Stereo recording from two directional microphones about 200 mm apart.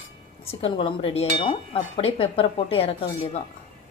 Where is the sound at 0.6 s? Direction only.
25° left (ahead or behind).